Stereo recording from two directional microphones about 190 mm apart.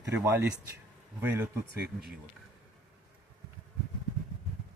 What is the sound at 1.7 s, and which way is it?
Speech, 55° right (ahead or behind).